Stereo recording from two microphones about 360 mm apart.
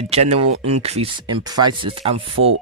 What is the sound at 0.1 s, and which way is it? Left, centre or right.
Speech, centre.